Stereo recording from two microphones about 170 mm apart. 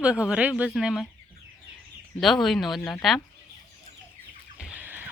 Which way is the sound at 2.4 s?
Centre (ahead or behind).